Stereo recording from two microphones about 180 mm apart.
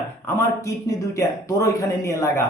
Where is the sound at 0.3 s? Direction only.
15° left (ahead or behind).